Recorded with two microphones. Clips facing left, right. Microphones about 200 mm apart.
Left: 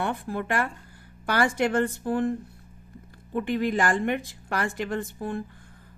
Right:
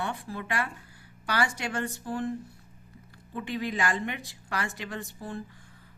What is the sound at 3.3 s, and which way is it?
A woman's voice, 50° left (ahead or behind).